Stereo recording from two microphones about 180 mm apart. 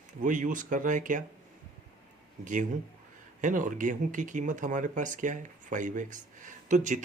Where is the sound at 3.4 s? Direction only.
45° right (ahead or behind).